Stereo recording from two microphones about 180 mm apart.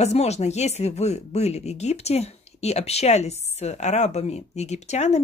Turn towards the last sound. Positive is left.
turn(degrees=40)  # may be behind; listen again after turning